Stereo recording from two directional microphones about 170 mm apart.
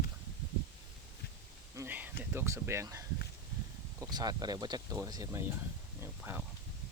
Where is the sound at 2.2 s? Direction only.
10° right (ahead or behind).